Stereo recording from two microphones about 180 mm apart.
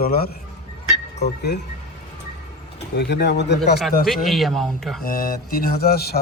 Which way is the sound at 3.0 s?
70° left (ahead or behind).